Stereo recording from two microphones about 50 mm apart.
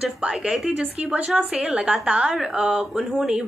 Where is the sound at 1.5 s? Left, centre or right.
Right.